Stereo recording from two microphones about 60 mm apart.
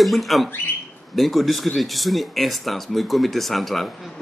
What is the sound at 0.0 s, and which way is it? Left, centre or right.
Speech, centre.